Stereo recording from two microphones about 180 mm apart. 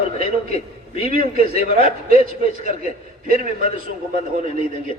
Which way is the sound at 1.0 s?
55° right (ahead or behind).